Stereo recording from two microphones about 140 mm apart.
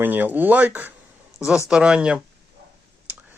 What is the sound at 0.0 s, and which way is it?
Speech, 15° right (ahead or behind).